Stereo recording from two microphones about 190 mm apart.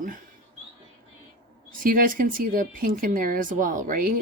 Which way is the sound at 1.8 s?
45° right (ahead or behind).